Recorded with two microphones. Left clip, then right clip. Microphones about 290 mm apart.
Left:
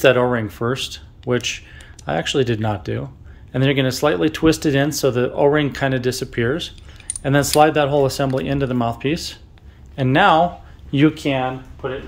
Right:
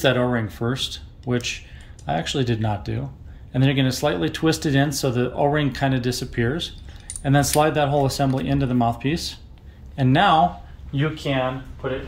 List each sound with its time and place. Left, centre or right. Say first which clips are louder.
0.0 s speech: left 6 dB; centre
10.9 s speech: left 8 dB; left